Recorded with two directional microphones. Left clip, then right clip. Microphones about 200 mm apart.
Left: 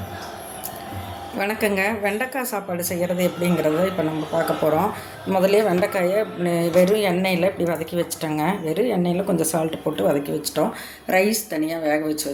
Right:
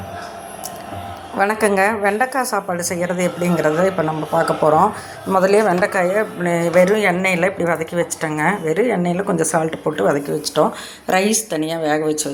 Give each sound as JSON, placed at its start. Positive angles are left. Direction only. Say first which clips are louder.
{"t": 1.6, "sound": "a woman's voice", "louder": "right 4 dB", "side_deg": -10}
{"t": 2.3, "sound": "a woman's voice", "louder": "right 6 dB", "side_deg": 10}
{"t": 2.9, "sound": "a woman's voice", "louder": "right 1 dB", "side_deg": -5}
{"t": 3.4, "sound": "a woman's voice", "louder": "right 6 dB", "side_deg": 5}
{"t": 4.4, "sound": "a woman's voice", "louder": "right 6 dB", "side_deg": -5}